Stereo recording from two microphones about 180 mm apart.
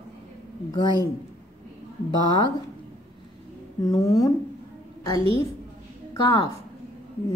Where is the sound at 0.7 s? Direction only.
20° left (ahead or behind).